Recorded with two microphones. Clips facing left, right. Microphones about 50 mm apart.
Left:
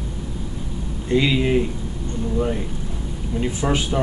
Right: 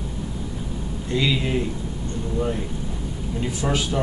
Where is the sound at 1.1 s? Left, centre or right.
Centre.